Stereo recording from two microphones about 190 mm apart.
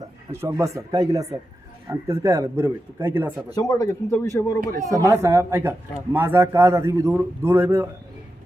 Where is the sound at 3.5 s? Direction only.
20° left (ahead or behind).